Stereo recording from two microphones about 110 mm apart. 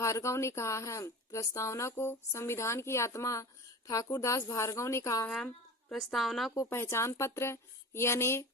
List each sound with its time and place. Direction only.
0.0 s speech: 25° left (ahead or behind)
5.9 s a woman's voice: centre (ahead or behind)
6.5 s speech: 25° left (ahead or behind)